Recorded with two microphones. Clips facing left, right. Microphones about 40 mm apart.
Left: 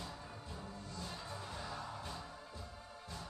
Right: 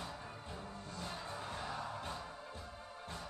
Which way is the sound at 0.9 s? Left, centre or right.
Right.